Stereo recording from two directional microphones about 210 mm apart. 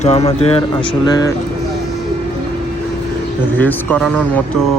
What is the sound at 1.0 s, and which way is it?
Speech, 20° left (ahead or behind).